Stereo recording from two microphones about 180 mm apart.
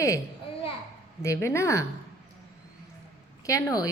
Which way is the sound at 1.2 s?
15° left (ahead or behind).